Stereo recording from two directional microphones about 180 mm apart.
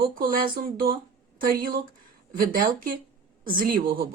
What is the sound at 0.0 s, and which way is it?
A woman's voice, 55° right (ahead or behind).